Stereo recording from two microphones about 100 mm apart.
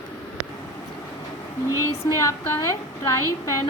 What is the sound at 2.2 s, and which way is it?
Speech, 30° left (ahead or behind).